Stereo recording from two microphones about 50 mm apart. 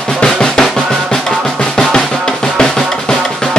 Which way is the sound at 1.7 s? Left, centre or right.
Centre.